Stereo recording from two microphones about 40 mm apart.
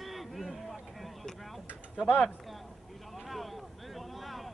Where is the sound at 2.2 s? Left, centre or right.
Centre.